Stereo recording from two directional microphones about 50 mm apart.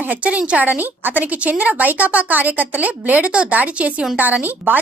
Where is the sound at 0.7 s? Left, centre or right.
Right.